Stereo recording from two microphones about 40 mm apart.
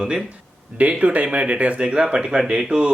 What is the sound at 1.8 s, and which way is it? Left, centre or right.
Speech, right.